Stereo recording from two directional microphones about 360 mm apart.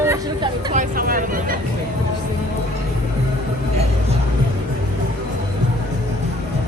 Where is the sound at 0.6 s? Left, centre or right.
Right.